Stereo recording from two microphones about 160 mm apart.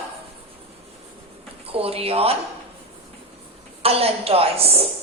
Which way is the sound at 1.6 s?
40° right (ahead or behind).